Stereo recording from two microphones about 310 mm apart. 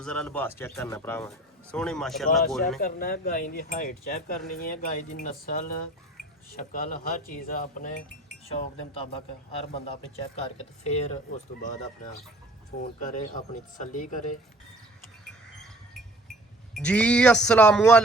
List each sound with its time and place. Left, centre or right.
0.0 s speech: centre
2.8 s cutlery: left
6.7 s cutlery: left
9.7 s cutlery: centre
16.7 s speech: centre